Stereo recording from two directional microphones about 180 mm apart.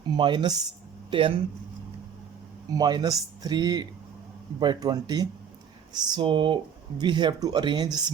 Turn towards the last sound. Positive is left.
turn(degrees=-25)  # may be behind; listen again after turning